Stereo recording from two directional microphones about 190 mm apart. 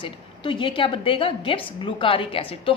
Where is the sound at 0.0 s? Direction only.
25° left (ahead or behind).